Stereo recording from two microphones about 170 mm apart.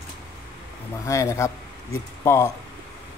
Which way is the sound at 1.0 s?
20° left (ahead or behind).